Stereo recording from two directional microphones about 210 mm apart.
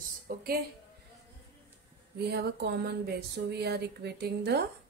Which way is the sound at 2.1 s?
50° right (ahead or behind).